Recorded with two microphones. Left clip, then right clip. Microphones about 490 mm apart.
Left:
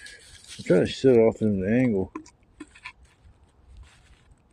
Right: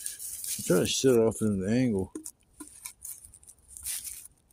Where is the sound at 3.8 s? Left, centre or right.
Right.